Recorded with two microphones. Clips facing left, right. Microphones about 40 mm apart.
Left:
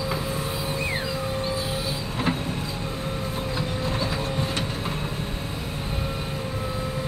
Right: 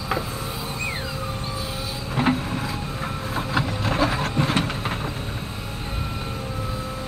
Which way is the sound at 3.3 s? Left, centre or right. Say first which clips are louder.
Right 3 dB; right.